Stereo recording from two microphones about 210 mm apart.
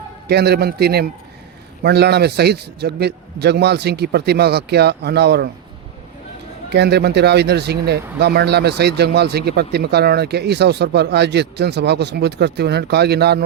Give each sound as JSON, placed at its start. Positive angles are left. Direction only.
{"t": 0.3, "sound": "speech", "side_deg": -50}
{"t": 6.7, "sound": "speech", "side_deg": -50}